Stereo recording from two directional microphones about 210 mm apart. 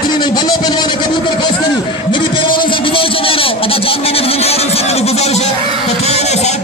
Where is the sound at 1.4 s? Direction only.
20° left (ahead or behind).